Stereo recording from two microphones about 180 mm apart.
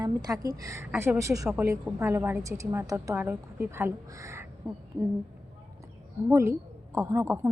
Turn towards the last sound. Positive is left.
turn(degrees=-15)  # may be behind; listen again after turning